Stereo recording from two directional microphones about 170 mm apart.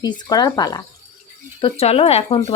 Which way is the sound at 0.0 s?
25° left (ahead or behind).